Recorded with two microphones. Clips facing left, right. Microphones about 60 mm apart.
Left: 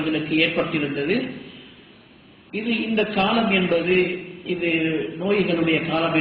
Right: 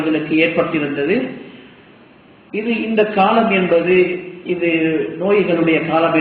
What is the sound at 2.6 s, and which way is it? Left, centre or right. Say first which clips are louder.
A man's voice: right 6 dB; right.